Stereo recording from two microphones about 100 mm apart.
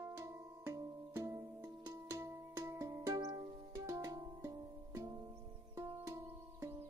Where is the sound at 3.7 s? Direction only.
30° right (ahead or behind).